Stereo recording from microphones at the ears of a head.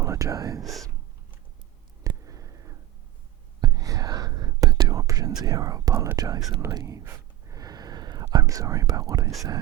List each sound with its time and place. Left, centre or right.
0.0 s speech: right
2.0 s a sound: right
3.6 s whispering: right